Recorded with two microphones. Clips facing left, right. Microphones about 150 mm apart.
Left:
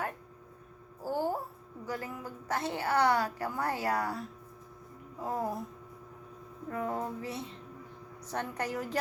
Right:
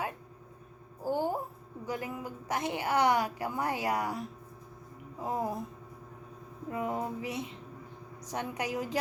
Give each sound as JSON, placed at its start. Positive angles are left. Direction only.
{"t": 1.0, "sound": "a sound", "side_deg": -15}
{"t": 1.9, "sound": "a woman's voice", "side_deg": -20}
{"t": 6.7, "sound": "a woman's voice", "side_deg": -15}